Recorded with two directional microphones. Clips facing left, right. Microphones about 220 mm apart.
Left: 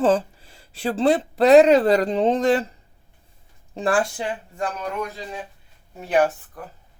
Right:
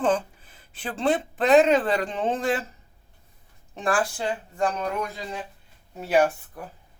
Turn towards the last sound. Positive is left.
turn(degrees=-10)  # may be behind; listen again after turning